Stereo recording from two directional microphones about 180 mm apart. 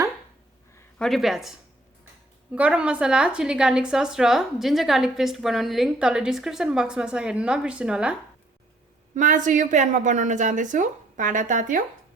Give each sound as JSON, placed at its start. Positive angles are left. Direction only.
{"t": 0.9, "sound": "a woman's voice", "side_deg": 0}
{"t": 9.1, "sound": "a woman's voice", "side_deg": -45}